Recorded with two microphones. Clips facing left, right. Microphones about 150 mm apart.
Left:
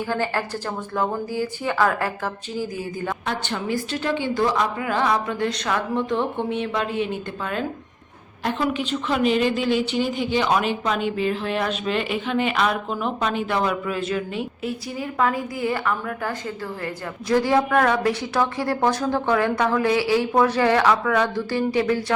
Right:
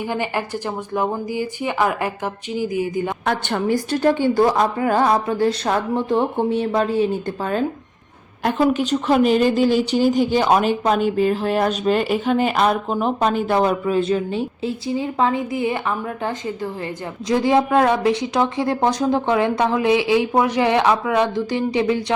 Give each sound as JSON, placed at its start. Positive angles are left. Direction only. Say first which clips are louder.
{"t": 0.1, "sound": "speech", "louder": "even", "side_deg": -15}
{"t": 3.2, "sound": "a woman's voice", "louder": "right 7 dB", "side_deg": -55}
{"t": 8.4, "sound": "a woman's voice", "louder": "right 6 dB", "side_deg": -45}